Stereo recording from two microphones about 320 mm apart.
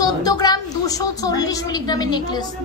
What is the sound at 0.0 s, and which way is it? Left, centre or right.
A woman's voice, centre.